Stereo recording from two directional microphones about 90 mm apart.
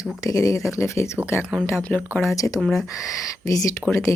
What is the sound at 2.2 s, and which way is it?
Speech, 40° left (ahead or behind).